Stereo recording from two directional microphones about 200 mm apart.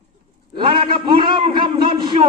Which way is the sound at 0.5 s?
25° right (ahead or behind).